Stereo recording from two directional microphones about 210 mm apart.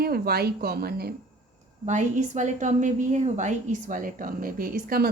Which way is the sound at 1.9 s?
35° right (ahead or behind).